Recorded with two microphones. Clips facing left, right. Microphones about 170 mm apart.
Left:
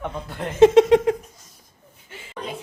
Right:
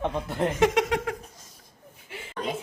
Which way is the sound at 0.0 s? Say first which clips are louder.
Right 3 dB; 25° right (ahead or behind).